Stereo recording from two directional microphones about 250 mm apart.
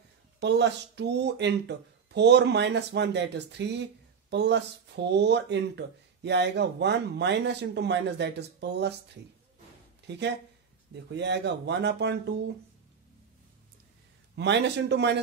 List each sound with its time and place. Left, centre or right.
0.4 s speech: right
10.0 s speech: right
14.3 s speech: right